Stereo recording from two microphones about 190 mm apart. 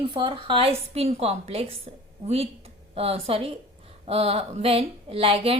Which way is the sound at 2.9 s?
30° right (ahead or behind).